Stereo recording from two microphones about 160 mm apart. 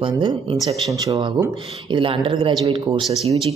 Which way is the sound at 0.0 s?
30° right (ahead or behind).